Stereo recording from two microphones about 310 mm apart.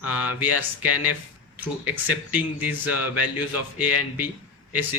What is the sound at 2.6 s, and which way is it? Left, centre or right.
A man's voice, left.